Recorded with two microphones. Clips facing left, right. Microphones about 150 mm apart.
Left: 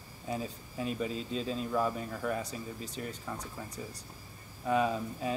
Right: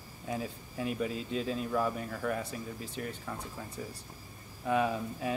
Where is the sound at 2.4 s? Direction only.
40° left (ahead or behind).